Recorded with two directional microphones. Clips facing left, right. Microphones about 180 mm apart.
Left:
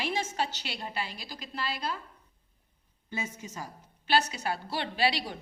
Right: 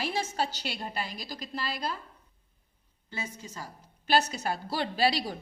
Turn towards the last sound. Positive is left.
turn(degrees=-40)  # may be behind; listen again after turning